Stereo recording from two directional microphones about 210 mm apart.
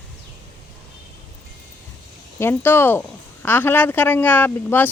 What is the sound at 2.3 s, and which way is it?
Speech, 10° left (ahead or behind).